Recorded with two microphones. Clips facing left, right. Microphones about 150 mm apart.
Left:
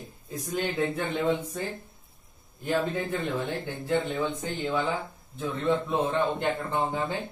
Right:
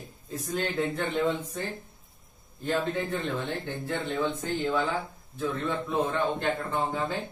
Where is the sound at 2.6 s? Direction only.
10° left (ahead or behind).